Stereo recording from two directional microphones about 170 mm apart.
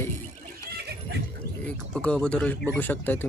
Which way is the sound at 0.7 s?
70° right (ahead or behind).